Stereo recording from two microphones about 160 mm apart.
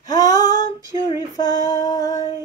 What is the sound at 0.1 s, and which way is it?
Female singing, 25° left (ahead or behind).